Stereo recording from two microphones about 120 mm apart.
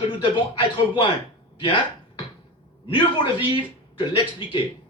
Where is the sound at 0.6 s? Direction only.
40° left (ahead or behind).